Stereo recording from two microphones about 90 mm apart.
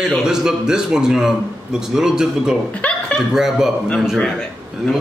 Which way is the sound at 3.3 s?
5° right (ahead or behind).